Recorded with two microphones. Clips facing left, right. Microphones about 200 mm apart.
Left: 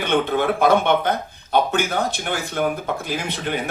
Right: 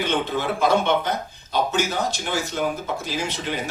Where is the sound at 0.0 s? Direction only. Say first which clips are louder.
Left 4 dB; 55° left (ahead or behind).